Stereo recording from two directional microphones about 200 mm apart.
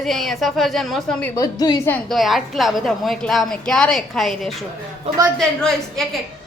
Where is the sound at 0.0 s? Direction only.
Centre (ahead or behind).